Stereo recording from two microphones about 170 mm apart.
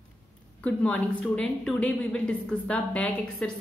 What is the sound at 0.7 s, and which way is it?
A woman's voice, 5° left (ahead or behind).